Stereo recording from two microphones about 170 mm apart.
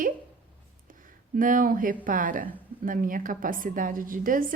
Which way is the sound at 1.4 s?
55° right (ahead or behind).